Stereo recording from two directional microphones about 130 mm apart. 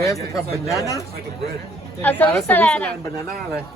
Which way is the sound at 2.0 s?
15° left (ahead or behind).